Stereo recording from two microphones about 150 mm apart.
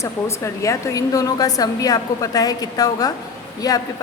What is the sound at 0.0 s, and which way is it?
A woman's voice, 20° left (ahead or behind).